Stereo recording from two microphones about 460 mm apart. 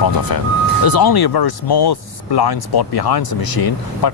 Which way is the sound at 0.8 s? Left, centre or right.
Left.